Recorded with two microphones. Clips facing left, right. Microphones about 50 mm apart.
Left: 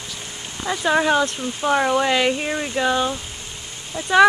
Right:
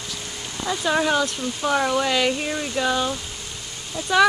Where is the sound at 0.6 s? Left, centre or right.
Left.